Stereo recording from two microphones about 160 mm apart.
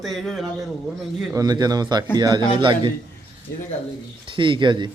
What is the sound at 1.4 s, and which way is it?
A man's voice, 25° right (ahead or behind).